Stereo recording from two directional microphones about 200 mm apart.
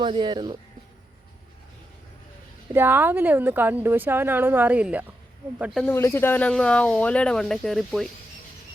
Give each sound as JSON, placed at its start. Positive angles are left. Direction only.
{"t": 0.0, "sound": "speech", "side_deg": -25}
{"t": 2.7, "sound": "speech", "side_deg": -10}
{"t": 5.8, "sound": "speech", "side_deg": 15}